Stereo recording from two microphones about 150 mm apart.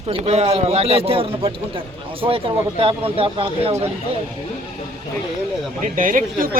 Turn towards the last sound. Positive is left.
turn(degrees=-65)  # may be behind; listen again after turning